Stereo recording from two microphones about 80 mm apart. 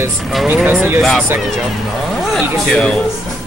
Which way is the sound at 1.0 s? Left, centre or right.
Centre.